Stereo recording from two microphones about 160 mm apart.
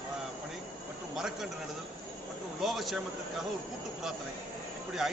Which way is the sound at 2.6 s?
Centre (ahead or behind).